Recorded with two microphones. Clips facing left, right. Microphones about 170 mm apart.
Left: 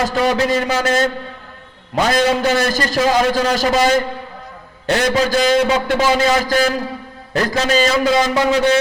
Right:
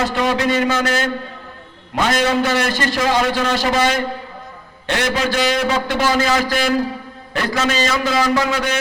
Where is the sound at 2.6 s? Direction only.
40° left (ahead or behind).